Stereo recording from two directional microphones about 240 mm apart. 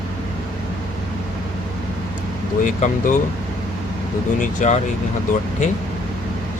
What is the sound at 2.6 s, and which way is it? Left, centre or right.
Speech, left.